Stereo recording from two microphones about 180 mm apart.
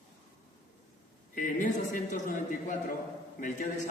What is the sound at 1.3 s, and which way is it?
A man's voice, 45° left (ahead or behind).